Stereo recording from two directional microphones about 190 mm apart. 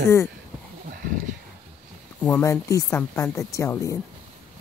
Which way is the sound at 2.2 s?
10° left (ahead or behind).